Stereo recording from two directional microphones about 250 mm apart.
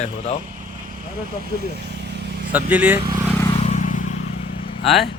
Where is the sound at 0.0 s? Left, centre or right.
Left.